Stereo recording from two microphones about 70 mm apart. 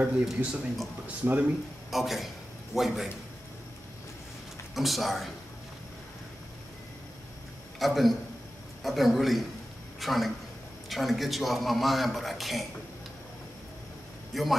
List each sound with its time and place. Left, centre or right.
0.0 s speech: centre
1.9 s a man's voice: centre
4.7 s a man's voice: centre
7.8 s a man's voice: centre
14.3 s a man's voice: centre